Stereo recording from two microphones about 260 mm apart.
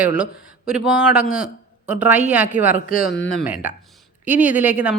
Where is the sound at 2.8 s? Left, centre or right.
Left.